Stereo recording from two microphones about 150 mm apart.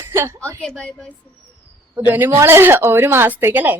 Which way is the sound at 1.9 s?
10° right (ahead or behind).